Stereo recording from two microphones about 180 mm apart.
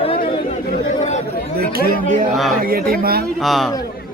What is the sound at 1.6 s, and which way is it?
Speech, 55° right (ahead or behind).